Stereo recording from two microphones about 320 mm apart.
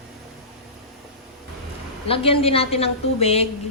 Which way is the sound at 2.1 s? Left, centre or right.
Centre.